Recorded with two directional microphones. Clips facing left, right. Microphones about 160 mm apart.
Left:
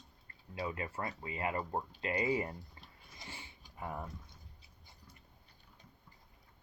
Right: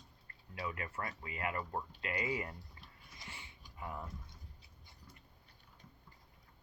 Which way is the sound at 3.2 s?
30° left (ahead or behind).